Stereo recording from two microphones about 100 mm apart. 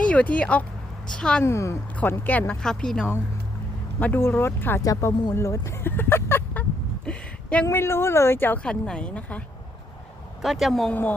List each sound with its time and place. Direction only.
0.0 s a woman's voice: 15° left (ahead or behind)
1.5 s speech: 30° left (ahead or behind)
2.0 s a woman's voice: 15° left (ahead or behind)
2.5 s speech: 5° left (ahead or behind)
4.0 s speech: 20° left (ahead or behind)
4.8 s speech: 30° left (ahead or behind)
8.6 s a woman's voice: 10° left (ahead or behind)
10.4 s speech: centre (ahead or behind)